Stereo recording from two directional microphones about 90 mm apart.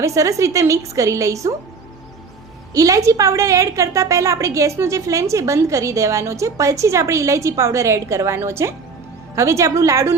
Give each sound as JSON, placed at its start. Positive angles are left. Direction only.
{"t": 0.0, "sound": "a woman's voice", "side_deg": -35}
{"t": 2.7, "sound": "a woman's voice", "side_deg": -40}